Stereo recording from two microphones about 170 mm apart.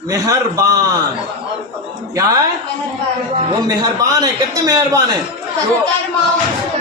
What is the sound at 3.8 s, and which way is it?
A man's voice, 20° right (ahead or behind).